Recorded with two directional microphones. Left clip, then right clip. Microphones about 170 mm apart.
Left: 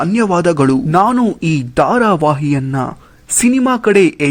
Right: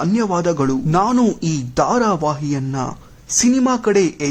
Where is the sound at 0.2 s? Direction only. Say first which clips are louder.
Left 7 dB; 30° left (ahead or behind).